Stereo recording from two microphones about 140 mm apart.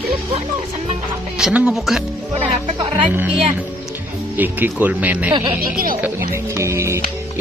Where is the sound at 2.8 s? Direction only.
35° right (ahead or behind).